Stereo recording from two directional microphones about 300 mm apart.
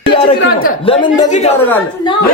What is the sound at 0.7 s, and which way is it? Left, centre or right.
Speech, centre.